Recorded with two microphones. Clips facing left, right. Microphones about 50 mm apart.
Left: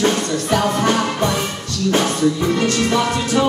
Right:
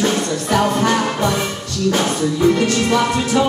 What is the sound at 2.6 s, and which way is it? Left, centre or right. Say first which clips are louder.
Music: right 1 dB; right.